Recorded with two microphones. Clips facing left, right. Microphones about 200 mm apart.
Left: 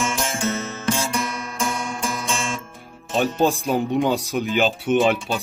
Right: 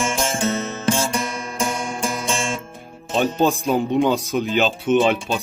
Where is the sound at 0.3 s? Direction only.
35° right (ahead or behind).